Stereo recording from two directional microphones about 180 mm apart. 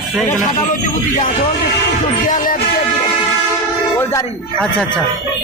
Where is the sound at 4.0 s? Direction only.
15° left (ahead or behind).